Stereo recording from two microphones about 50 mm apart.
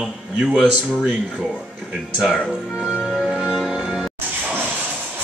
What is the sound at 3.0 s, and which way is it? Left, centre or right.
Music, centre.